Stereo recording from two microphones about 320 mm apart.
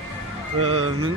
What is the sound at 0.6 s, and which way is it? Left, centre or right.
Speech, right.